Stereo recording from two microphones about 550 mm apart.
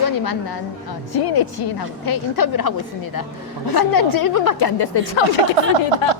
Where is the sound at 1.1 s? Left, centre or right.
Left.